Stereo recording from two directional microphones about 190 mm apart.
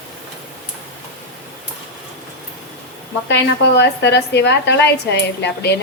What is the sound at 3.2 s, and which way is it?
A woman's voice, 65° left (ahead or behind).